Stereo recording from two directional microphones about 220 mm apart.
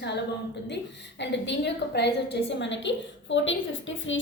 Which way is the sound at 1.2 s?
50° left (ahead or behind).